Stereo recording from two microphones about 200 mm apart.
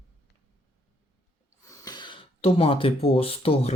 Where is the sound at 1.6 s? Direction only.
15° left (ahead or behind).